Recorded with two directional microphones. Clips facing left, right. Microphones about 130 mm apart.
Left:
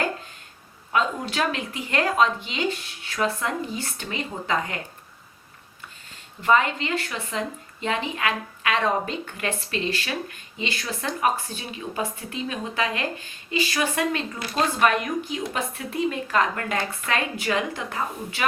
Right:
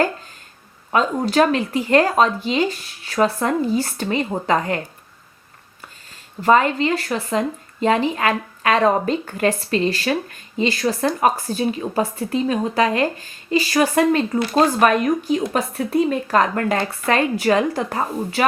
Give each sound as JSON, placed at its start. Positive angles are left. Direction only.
{"t": 0.9, "sound": "speech", "side_deg": -40}
{"t": 6.4, "sound": "speech", "side_deg": -40}